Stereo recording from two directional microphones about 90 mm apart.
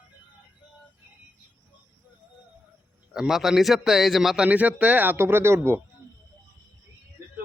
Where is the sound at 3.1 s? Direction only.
5° right (ahead or behind).